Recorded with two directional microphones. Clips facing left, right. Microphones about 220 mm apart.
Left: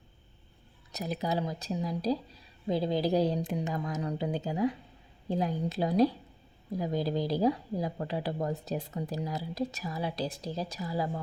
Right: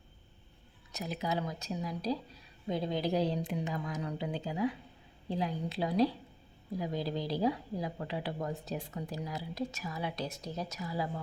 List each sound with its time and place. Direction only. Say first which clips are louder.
0.9 s a woman's voice: left 3 dB; 40° left (ahead or behind)